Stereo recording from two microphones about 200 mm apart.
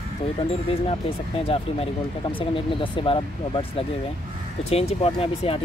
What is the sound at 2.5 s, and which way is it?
Speech, 25° left (ahead or behind).